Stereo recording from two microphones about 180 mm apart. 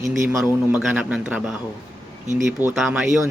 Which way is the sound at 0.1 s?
Centre (ahead or behind).